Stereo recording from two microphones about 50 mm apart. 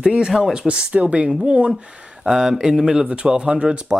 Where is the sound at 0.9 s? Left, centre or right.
Right.